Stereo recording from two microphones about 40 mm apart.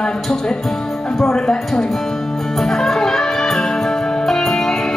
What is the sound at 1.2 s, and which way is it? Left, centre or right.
Speech, centre.